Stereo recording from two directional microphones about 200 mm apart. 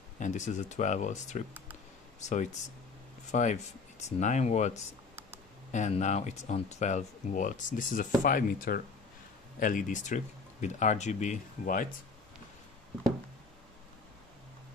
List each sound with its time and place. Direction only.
0.2 s speech: 35° left (ahead or behind)